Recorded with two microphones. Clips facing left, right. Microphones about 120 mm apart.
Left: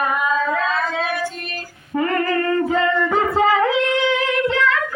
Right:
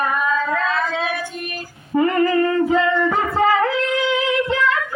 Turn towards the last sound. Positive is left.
turn(degrees=-5)  # may be behind; listen again after turning